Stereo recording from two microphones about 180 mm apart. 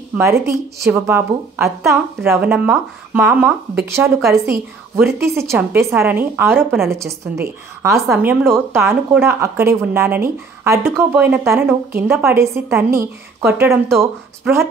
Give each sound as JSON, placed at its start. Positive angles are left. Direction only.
{"t": 0.5, "sound": "a woman's voice", "side_deg": -15}